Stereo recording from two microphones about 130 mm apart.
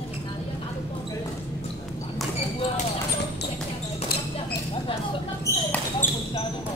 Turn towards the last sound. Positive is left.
turn(degrees=15)  # may be behind; listen again after turning